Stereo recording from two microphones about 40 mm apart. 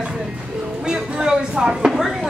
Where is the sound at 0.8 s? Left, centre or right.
Centre.